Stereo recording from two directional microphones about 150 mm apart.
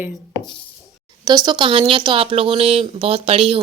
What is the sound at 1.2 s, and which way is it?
Speech, 25° right (ahead or behind).